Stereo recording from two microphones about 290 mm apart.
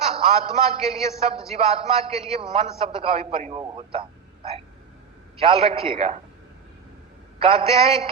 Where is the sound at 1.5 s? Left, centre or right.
Right.